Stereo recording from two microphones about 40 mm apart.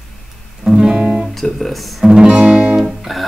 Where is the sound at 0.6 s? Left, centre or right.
Centre.